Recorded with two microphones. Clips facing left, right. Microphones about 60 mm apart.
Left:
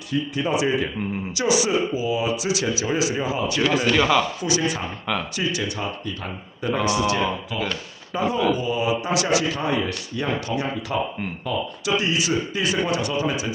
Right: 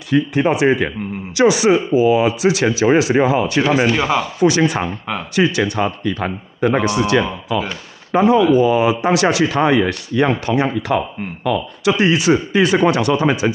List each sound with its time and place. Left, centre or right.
0.1 s a man's voice: right
3.8 s a man's voice: centre
4.4 s a man's voice: right
8.1 s speech: right
8.5 s a man's voice: right